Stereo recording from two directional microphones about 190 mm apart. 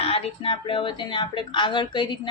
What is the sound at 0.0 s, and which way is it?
Speech, 30° left (ahead or behind).